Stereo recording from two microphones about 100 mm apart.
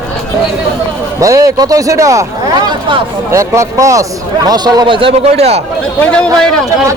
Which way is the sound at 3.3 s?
30° right (ahead or behind).